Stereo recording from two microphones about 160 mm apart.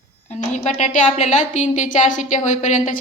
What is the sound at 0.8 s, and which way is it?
A woman's voice, 50° left (ahead or behind).